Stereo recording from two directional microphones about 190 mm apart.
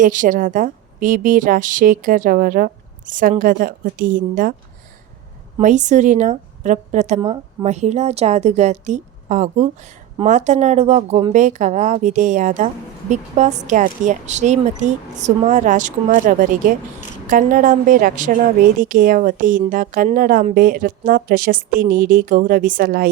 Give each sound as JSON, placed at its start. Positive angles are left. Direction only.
{"t": 0.0, "sound": "a woman's voice", "side_deg": -45}
{"t": 5.5, "sound": "a woman's voice", "side_deg": -40}